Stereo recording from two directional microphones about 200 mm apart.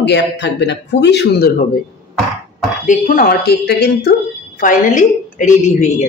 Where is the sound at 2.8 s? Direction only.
40° left (ahead or behind).